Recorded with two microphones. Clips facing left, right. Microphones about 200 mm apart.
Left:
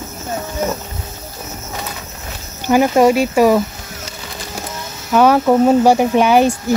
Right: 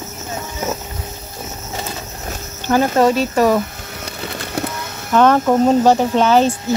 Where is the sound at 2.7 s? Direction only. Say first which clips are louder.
Left 3 dB; 15° left (ahead or behind).